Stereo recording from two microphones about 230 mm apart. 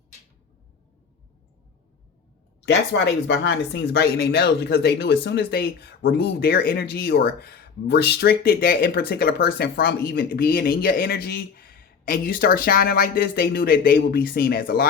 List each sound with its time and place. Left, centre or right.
2.6 s speech: left